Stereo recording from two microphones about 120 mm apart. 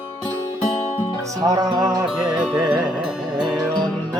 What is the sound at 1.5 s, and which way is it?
Music, 35° right (ahead or behind).